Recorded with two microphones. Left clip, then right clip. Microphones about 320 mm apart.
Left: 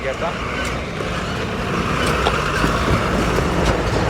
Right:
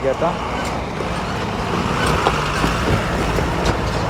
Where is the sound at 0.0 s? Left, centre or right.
Centre.